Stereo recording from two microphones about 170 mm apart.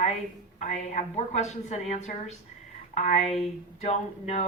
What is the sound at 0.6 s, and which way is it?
A woman's voice, 40° left (ahead or behind).